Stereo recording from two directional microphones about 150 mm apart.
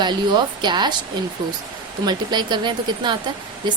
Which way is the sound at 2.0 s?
30° right (ahead or behind).